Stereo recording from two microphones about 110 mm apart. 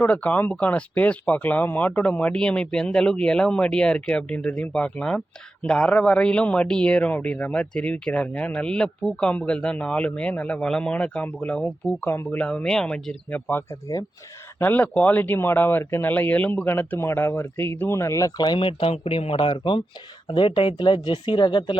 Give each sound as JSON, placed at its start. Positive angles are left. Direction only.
{"t": 0.0, "sound": "speech", "side_deg": 15}
{"t": 18.3, "sound": "speech", "side_deg": 40}